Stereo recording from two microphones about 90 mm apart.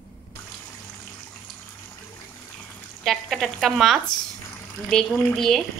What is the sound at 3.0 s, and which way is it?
Speech, centre (ahead or behind).